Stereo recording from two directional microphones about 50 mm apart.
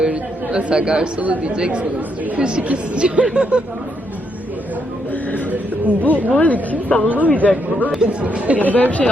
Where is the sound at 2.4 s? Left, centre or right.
Right.